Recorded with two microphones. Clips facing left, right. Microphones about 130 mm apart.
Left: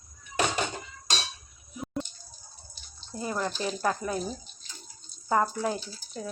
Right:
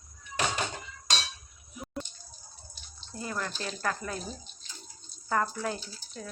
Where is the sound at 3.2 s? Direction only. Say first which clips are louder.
Left 5 dB; 20° left (ahead or behind).